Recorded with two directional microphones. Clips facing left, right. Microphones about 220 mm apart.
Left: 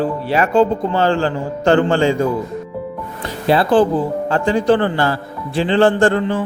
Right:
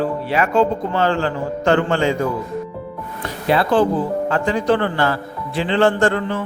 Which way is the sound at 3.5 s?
30° left (ahead or behind).